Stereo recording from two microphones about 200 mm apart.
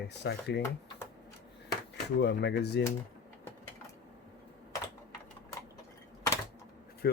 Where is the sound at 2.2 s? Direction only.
60° left (ahead or behind).